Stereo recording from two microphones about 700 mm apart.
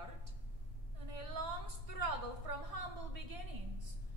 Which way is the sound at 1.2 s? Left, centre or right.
Right.